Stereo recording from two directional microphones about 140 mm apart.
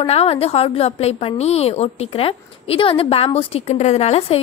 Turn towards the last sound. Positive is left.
turn(degrees=45)  # may be behind; listen again after turning